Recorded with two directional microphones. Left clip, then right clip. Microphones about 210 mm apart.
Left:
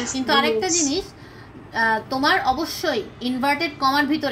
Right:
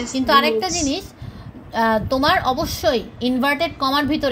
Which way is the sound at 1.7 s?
45° right (ahead or behind).